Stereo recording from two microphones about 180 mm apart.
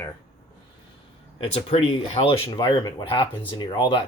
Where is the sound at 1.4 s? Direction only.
35° left (ahead or behind).